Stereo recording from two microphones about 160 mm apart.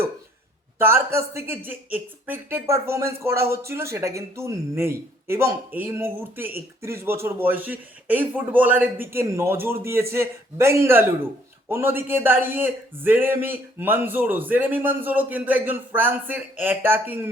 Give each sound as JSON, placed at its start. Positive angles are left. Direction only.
{"t": 0.8, "sound": "speech", "side_deg": -15}